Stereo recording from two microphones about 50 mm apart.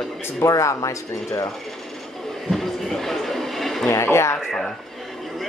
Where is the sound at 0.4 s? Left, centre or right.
Left.